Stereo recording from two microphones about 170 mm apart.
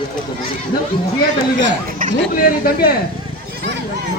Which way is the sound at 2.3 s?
55° left (ahead or behind).